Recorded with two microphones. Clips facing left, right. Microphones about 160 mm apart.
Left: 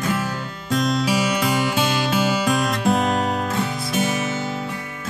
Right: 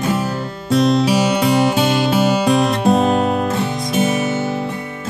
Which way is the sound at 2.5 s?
30° right (ahead or behind).